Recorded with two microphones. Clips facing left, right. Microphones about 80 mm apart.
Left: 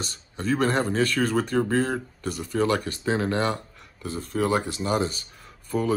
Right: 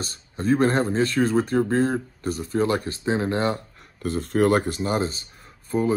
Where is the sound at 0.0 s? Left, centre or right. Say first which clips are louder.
Right 3 dB; right.